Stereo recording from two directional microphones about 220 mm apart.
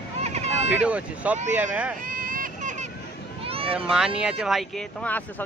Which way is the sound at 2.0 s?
40° right (ahead or behind).